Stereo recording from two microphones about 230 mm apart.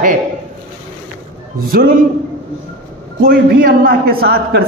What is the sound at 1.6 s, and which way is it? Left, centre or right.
Speech, right.